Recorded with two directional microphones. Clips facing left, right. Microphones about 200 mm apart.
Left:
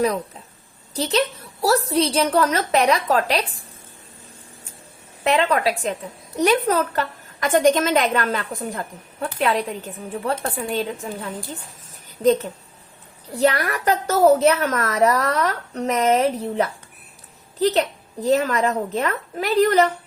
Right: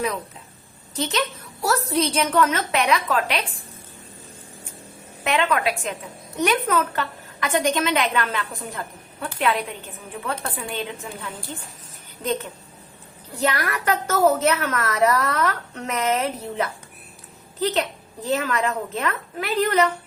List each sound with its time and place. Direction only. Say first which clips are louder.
0.9 s a woman's voice: left 4 dB; 35° left (ahead or behind)
5.2 s a woman's voice: left 3 dB; 35° left (ahead or behind)
13.3 s a woman's voice: left 5 dB; 35° left (ahead or behind)